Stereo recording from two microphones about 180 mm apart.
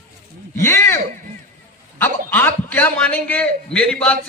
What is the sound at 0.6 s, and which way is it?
Speech, 15° left (ahead or behind).